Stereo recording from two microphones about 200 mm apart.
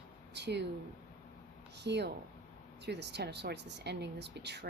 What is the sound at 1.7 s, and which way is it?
A woman's voice, 60° right (ahead or behind).